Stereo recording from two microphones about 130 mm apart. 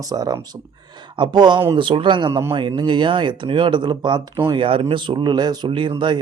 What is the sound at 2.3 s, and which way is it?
Speech, 20° right (ahead or behind).